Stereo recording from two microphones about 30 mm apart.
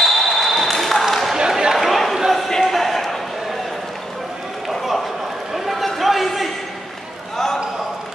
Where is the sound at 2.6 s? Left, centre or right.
Centre.